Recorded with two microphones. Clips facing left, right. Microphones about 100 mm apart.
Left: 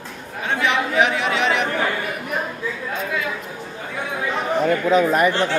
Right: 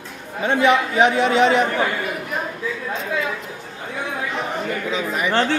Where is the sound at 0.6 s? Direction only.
25° right (ahead or behind).